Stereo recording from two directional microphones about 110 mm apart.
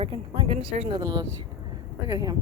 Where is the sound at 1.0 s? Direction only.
35° right (ahead or behind).